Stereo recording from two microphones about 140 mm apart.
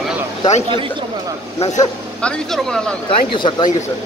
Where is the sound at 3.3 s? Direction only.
35° left (ahead or behind).